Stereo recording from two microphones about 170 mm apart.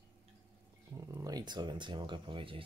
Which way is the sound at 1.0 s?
20° right (ahead or behind).